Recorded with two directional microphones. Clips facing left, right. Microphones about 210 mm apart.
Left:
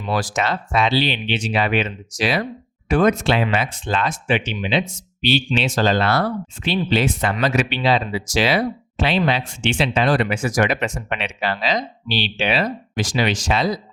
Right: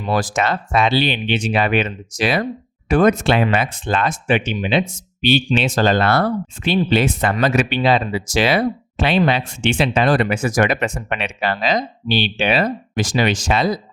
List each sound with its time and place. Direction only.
0.1 s speech: 50° right (ahead or behind)